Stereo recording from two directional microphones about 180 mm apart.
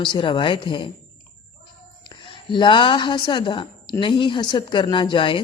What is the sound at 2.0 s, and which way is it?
A woman's voice, 25° left (ahead or behind).